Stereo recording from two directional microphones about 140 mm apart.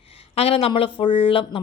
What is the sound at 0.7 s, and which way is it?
Speech, 40° left (ahead or behind).